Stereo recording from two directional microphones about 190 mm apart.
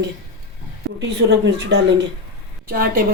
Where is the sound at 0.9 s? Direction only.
65° right (ahead or behind).